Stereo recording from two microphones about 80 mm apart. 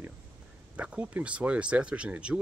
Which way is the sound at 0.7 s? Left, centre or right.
Centre.